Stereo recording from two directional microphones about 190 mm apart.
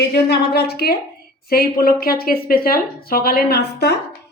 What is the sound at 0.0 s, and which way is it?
A woman's voice, 60° left (ahead or behind).